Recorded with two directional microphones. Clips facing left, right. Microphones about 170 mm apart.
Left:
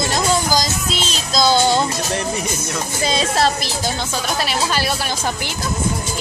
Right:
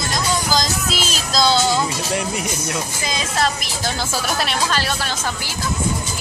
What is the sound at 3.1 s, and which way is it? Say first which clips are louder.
Speech: left 5 dB; 30° left (ahead or behind).